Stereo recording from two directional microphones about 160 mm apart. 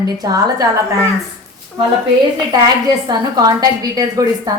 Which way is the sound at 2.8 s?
25° right (ahead or behind).